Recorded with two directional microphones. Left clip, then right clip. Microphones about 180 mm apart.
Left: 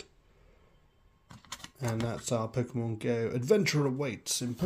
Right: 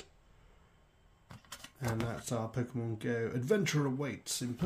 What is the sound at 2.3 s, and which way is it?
Speech, 30° left (ahead or behind).